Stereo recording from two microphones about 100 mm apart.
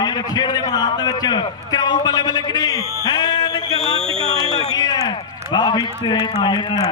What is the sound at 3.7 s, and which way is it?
Speech, 65° right (ahead or behind).